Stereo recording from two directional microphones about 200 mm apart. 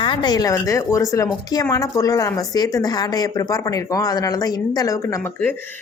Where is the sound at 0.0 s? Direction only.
20° left (ahead or behind).